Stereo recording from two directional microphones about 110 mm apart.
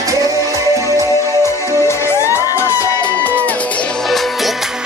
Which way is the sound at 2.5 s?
25° left (ahead or behind).